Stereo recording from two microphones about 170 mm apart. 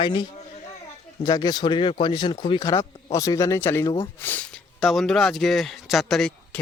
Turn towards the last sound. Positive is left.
turn(degrees=0)  # may be behind; listen again after turning